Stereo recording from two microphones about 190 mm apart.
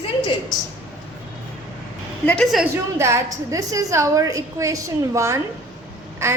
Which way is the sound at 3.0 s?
15° right (ahead or behind).